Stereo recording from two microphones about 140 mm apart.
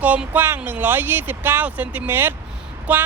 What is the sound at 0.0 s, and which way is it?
Speech, 10° right (ahead or behind).